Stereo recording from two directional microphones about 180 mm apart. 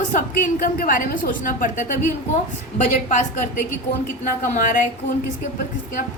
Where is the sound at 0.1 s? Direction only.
45° left (ahead or behind).